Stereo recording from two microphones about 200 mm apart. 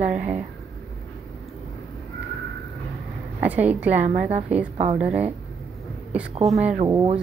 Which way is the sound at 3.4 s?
5° right (ahead or behind).